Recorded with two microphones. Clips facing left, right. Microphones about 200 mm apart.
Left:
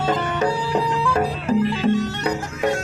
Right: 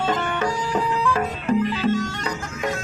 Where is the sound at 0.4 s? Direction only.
30° left (ahead or behind).